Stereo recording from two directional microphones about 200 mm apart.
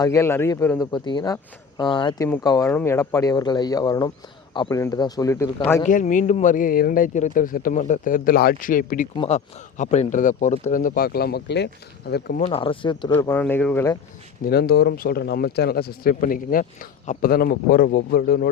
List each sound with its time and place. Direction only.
0.0 s speech: 15° left (ahead or behind)
5.8 s speech: 40° left (ahead or behind)
9.1 s speech: 30° left (ahead or behind); by 12.4 s 55° left (ahead or behind)
12.4 s speech: 25° left (ahead or behind)
13.1 s speech: 10° left (ahead or behind)
14.4 s speech: 55° left (ahead or behind)